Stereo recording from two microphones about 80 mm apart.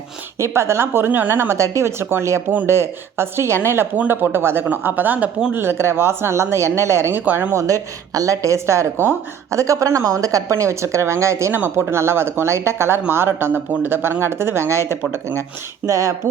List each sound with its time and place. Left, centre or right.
0.3 s a woman's voice: right
3.9 s speech: right
5.5 s a woman's voice: right
7.3 s speech: right
7.5 s a woman's voice: right